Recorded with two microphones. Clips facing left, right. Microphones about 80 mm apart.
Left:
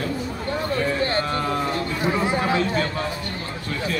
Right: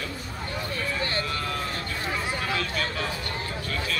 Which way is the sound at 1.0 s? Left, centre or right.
Left.